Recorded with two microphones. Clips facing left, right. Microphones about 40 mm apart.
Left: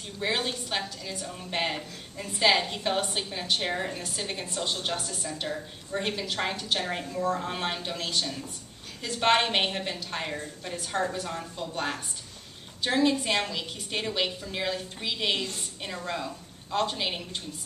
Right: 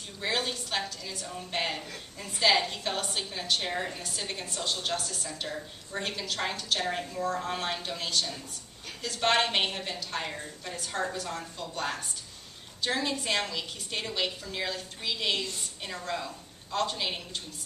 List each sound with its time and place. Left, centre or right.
0.2 s a woman's voice: centre